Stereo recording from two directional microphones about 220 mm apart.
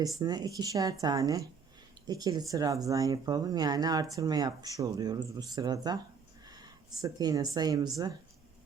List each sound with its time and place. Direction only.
0.2 s speech: 15° right (ahead or behind)